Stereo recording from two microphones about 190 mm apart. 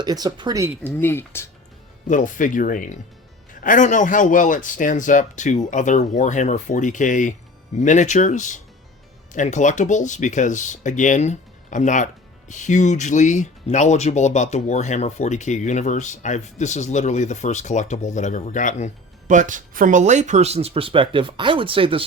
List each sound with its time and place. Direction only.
0.0 s speech: 20° right (ahead or behind)
0.9 s speech: 10° left (ahead or behind)
2.0 s speech: 45° left (ahead or behind)
19.3 s speech: 40° right (ahead or behind)